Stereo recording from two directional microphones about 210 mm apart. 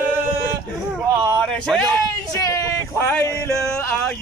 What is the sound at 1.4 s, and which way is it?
Speech, 5° left (ahead or behind).